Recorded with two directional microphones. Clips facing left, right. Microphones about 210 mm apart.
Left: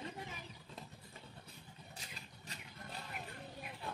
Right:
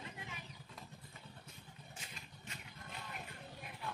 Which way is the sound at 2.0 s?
35° left (ahead or behind).